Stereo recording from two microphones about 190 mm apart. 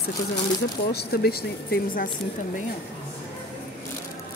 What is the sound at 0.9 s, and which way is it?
Speech, 55° left (ahead or behind).